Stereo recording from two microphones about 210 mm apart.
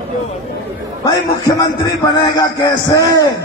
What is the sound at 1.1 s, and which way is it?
Speech, 20° left (ahead or behind).